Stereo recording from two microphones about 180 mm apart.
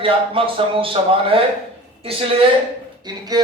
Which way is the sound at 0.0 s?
30° right (ahead or behind).